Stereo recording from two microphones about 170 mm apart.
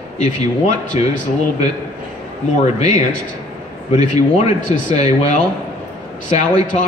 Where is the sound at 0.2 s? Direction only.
40° left (ahead or behind).